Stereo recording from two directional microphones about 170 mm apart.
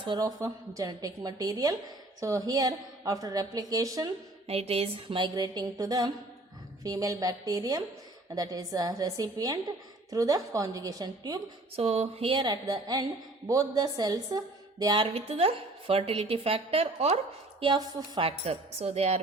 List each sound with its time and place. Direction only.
0.0 s a woman's voice: 25° right (ahead or behind)
4.4 s a woman's voice: 35° right (ahead or behind)
11.8 s a woman's voice: 40° right (ahead or behind)
17.6 s a woman's voice: 25° right (ahead or behind)
18.2 s a woman's voice: 35° right (ahead or behind)